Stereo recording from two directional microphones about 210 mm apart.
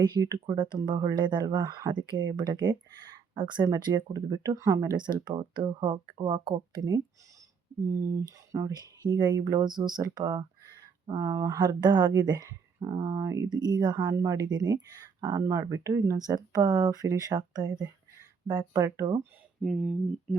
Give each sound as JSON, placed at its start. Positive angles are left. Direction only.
{"t": 0.0, "sound": "speech", "side_deg": -20}
{"t": 19.6, "sound": "speech", "side_deg": 0}